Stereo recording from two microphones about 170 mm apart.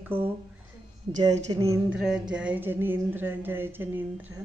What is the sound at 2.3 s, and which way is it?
A woman's voice, 5° right (ahead or behind).